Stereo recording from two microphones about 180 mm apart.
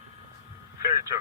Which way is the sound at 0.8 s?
20° right (ahead or behind).